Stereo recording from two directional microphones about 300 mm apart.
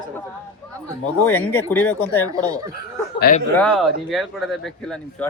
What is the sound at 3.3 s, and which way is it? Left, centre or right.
Speech, left.